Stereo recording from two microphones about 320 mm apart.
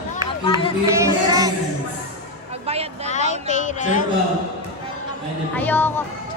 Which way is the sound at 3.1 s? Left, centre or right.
Left.